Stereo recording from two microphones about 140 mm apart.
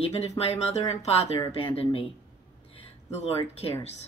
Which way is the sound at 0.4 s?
50° left (ahead or behind).